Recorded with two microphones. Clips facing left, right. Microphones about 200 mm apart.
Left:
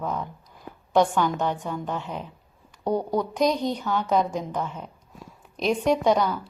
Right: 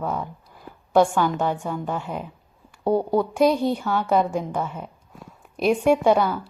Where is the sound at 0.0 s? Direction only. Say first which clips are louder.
Right 2 dB; 5° right (ahead or behind).